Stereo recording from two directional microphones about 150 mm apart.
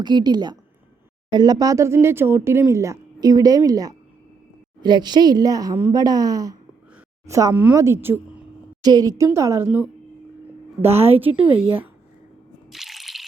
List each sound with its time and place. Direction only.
0.0 s a woman's voice: 30° right (ahead or behind); by 9.9 s 15° right (ahead or behind)
10.8 s a woman's voice: 40° right (ahead or behind)
12.7 s drip: centre (ahead or behind)